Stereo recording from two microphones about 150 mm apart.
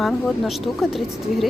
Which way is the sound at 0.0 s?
Centre (ahead or behind).